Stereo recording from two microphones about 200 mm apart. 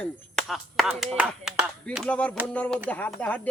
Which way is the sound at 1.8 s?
5° left (ahead or behind).